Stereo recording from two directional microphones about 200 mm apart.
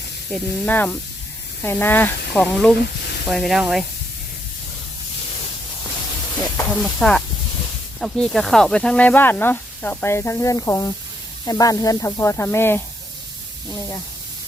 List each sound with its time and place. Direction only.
0.3 s speech: 5° left (ahead or behind)
3.0 s sizzle: 55° left (ahead or behind)
3.2 s speech: centre (ahead or behind)
6.4 s a sound: 5° left (ahead or behind)
7.9 s speech: centre (ahead or behind)